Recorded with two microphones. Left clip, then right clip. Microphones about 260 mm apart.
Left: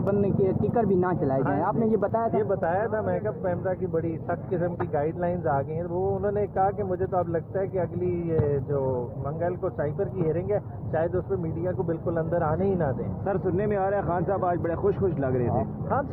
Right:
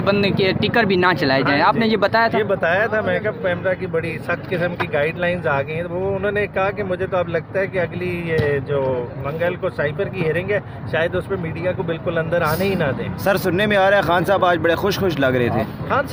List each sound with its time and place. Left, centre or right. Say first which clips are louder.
0.0 s speech: right 7 dB; right
2.5 s speech: right 8 dB; centre
9.4 s speech: right 7 dB; centre
12.1 s speech: right 8 dB; centre
13.2 s speech: right 9 dB; right